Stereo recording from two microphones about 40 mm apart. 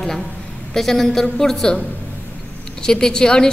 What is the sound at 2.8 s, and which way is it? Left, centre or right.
Speech, centre.